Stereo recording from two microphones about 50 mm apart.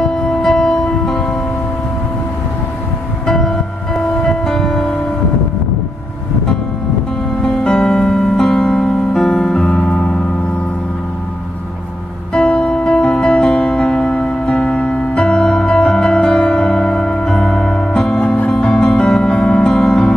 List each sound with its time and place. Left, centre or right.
0.0 s music: centre
3.3 s music: centre
7.4 s music: centre
12.4 s music: centre